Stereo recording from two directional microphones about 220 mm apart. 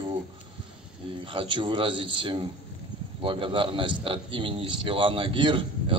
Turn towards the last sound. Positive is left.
turn(degrees=-25)  # may be behind; listen again after turning